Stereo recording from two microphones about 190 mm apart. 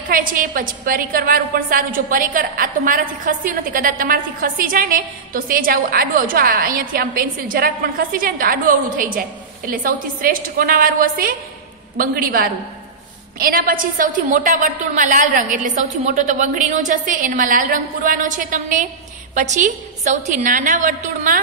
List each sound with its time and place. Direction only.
0.1 s a woman's voice: 45° right (ahead or behind)